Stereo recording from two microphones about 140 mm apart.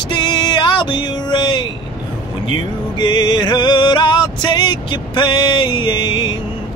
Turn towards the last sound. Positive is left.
turn(degrees=35)  # may be behind; listen again after turning